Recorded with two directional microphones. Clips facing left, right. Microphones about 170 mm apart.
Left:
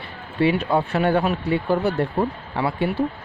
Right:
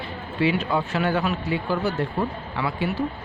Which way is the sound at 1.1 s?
55° left (ahead or behind).